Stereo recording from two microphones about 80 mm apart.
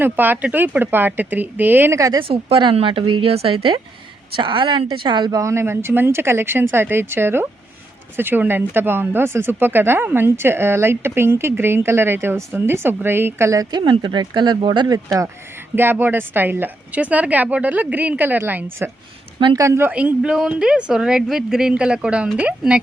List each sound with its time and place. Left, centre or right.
0.0 s speech: right
2.2 s speech: right
5.4 s speech: right
13.5 s speech: right
13.7 s speech: right
14.8 s speech: right
15.7 s speech: right
19.5 s a woman's voice: right
19.9 s speech: centre